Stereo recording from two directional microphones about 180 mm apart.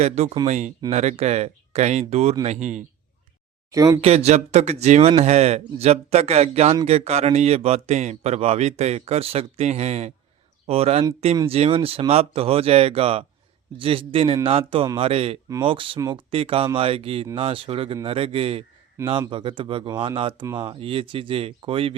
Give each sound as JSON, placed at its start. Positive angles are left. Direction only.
{"t": 0.0, "sound": "speech", "side_deg": -35}
{"t": 3.7, "sound": "speech", "side_deg": -20}
{"t": 4.0, "sound": "speech", "side_deg": -35}
{"t": 15.4, "sound": "speech", "side_deg": -20}
{"t": 15.7, "sound": "speech", "side_deg": -30}
{"t": 16.3, "sound": "speech", "side_deg": -30}
{"t": 19.0, "sound": "speech", "side_deg": -15}
{"t": 19.3, "sound": "speech", "side_deg": -30}